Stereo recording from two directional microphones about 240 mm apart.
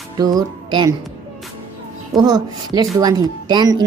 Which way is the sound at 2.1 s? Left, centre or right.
Centre.